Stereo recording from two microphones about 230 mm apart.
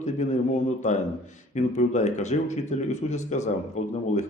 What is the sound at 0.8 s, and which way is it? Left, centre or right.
A man's voice, left.